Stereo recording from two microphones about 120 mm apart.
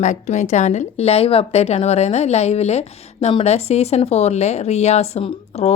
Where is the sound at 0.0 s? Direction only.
80° left.